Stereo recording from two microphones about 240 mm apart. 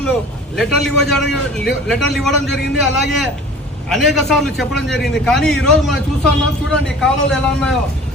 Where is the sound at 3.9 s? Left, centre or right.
Centre.